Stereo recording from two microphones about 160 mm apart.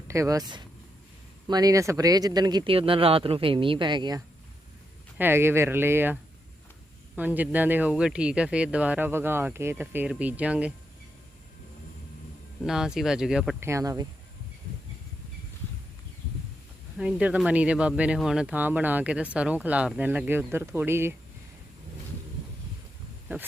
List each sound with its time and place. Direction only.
0.1 s speech: 20° right (ahead or behind)
5.1 s speech: 15° right (ahead or behind)
7.2 s speech: 10° right (ahead or behind)
12.6 s speech: 5° right (ahead or behind)
13.6 s speech: 15° right (ahead or behind)
17.0 s speech: 5° right (ahead or behind)